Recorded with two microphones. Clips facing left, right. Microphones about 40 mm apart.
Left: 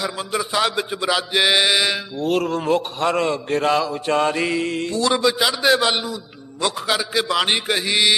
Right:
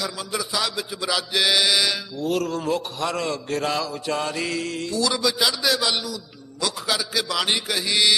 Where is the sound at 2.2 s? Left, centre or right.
Left.